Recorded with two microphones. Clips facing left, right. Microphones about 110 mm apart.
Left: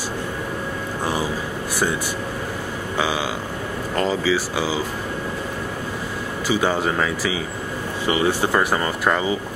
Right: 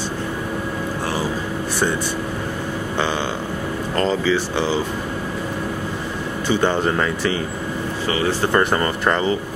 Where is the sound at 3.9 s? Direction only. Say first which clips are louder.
Right 1 dB; 5° left (ahead or behind).